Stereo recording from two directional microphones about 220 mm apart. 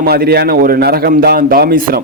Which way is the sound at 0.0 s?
45° right (ahead or behind).